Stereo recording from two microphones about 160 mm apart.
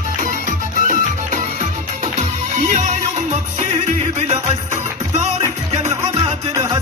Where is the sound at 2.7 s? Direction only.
50° right (ahead or behind).